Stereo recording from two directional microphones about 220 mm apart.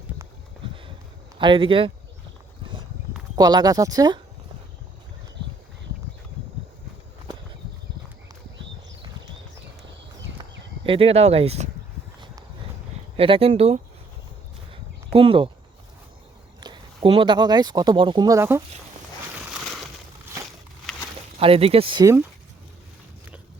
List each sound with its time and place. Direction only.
1.4 s speech: 20° right (ahead or behind)
3.3 s speech: 20° right (ahead or behind)
10.8 s speech: 25° right (ahead or behind)
13.1 s speech: 25° right (ahead or behind)
14.7 s a sound: 25° right (ahead or behind)
16.6 s speech: 20° right (ahead or behind)
21.3 s speech: 25° right (ahead or behind)